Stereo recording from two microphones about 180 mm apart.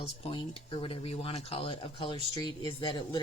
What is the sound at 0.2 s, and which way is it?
Speech, 30° left (ahead or behind).